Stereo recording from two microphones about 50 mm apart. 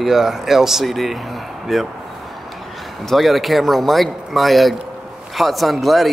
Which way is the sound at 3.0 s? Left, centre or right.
Centre.